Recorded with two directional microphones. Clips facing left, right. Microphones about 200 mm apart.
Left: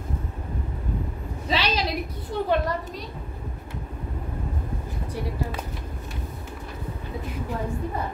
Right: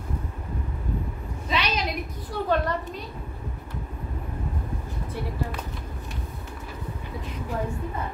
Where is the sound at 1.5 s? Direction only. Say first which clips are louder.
Left 2 dB; 30° left (ahead or behind).